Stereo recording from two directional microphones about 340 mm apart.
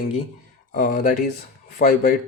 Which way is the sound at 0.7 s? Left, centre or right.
Left.